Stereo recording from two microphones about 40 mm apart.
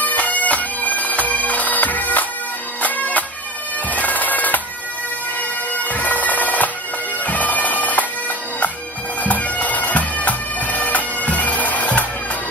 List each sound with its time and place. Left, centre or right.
0.0 s bagpipes: left
5.9 s bagpipes: left
9.2 s bagpipes: left